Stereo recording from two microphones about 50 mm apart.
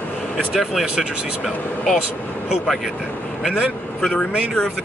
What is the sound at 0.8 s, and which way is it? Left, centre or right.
Speech, centre.